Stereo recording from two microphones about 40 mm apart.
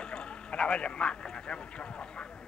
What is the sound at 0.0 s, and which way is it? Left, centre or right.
Speech, left.